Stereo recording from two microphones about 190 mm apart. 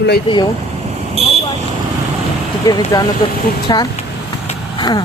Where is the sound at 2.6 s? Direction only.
20° left (ahead or behind).